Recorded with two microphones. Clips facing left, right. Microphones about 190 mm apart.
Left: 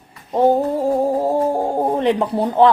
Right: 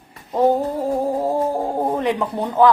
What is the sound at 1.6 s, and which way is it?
Speech, 30° left (ahead or behind).